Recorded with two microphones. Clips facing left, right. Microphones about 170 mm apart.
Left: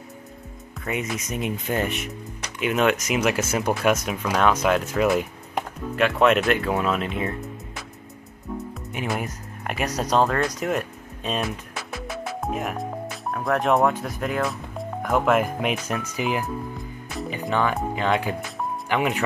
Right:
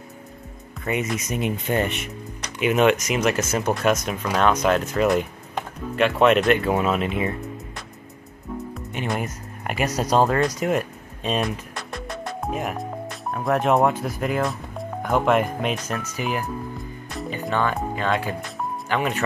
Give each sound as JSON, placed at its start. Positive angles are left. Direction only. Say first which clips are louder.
{"t": 0.8, "sound": "speech", "louder": "right 3 dB", "side_deg": 0}
{"t": 15.6, "sound": "speech", "louder": "even", "side_deg": 15}
{"t": 16.7, "sound": "music", "louder": "even", "side_deg": 0}
{"t": 17.3, "sound": "speech", "louder": "even", "side_deg": 15}